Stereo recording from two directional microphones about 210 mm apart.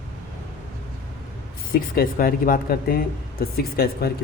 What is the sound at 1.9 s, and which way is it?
Speech, 45° left (ahead or behind).